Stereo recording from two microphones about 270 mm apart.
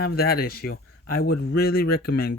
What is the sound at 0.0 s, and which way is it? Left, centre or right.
Speech, left.